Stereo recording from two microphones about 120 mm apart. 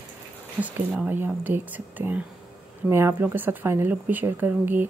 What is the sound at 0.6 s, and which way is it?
Speech, 15° right (ahead or behind).